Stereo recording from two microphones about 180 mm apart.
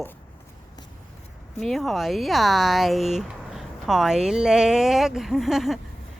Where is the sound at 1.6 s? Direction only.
Centre (ahead or behind).